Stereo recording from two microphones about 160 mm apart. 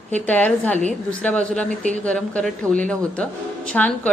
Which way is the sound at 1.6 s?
50° right (ahead or behind).